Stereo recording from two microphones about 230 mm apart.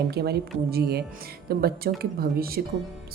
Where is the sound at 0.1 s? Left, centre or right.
Right.